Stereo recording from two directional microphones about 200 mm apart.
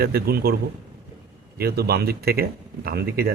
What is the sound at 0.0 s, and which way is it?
Speech, 50° right (ahead or behind).